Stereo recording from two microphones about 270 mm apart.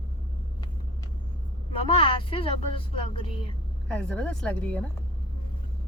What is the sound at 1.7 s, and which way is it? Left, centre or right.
A woman's voice, centre.